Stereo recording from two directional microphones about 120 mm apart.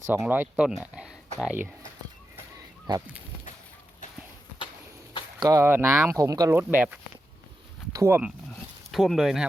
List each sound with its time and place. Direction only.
0.1 s speech: 15° right (ahead or behind)
5.4 s speech: 25° right (ahead or behind)
6.6 s speech: 15° right (ahead or behind)
8.9 s speech: centre (ahead or behind)